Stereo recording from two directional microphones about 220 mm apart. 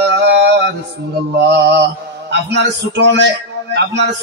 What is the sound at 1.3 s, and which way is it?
A man's voice, 50° right (ahead or behind).